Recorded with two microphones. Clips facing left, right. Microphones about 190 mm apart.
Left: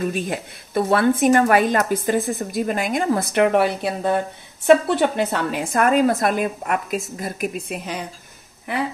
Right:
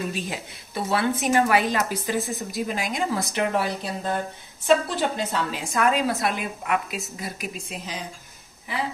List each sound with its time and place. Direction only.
0.1 s a woman's voice: 55° left (ahead or behind)